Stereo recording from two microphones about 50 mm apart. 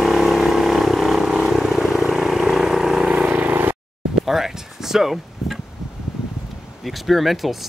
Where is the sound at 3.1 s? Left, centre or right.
Right.